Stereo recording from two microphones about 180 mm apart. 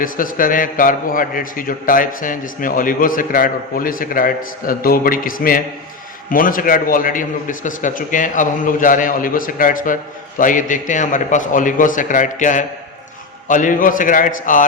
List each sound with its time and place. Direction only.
0.0 s a man's voice: 50° left (ahead or behind)